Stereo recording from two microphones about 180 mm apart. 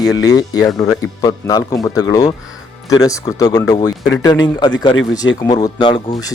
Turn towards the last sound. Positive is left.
turn(degrees=25)  # may be behind; listen again after turning